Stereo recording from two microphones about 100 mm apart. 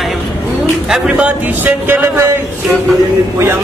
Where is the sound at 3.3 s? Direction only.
25° right (ahead or behind).